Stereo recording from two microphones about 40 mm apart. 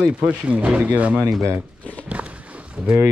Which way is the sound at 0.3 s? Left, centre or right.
Right.